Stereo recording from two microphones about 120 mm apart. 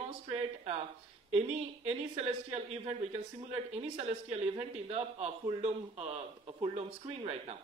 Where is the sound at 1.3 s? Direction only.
60° right (ahead or behind).